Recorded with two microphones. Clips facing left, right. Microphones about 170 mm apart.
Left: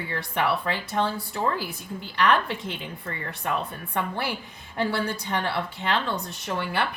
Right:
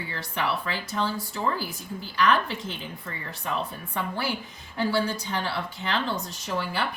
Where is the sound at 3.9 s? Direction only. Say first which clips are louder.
Left 2 dB; 60° left (ahead or behind).